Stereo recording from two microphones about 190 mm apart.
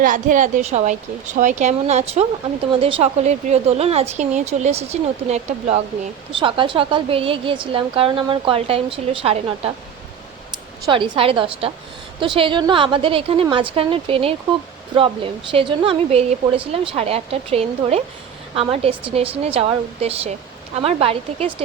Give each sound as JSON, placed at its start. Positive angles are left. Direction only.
{"t": 0.0, "sound": "a woman's voice", "side_deg": -45}
{"t": 10.8, "sound": "a woman's voice", "side_deg": -25}